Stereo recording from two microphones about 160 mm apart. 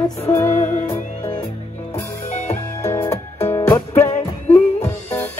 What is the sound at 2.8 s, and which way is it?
Music, 15° left (ahead or behind).